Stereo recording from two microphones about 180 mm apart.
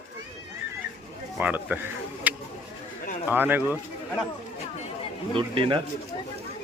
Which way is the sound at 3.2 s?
10° right (ahead or behind).